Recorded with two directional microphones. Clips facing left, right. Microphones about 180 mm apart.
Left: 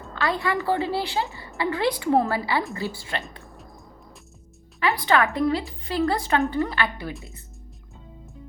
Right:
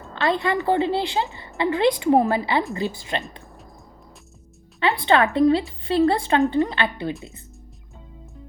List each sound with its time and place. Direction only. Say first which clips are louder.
0.1 s a woman's voice: right 3 dB; 20° right (ahead or behind)
3.4 s a sound: even; centre (ahead or behind)
4.8 s a woman's voice: right 3 dB; 25° right (ahead or behind)